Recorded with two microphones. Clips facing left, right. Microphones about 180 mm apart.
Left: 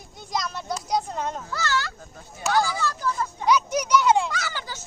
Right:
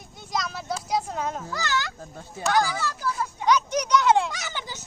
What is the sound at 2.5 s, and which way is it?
Speech, 15° right (ahead or behind).